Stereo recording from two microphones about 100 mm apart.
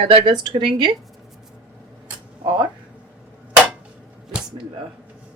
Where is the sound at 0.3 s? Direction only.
55° right (ahead or behind).